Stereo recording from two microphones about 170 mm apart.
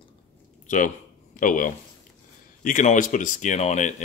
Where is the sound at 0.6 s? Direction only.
45° left (ahead or behind).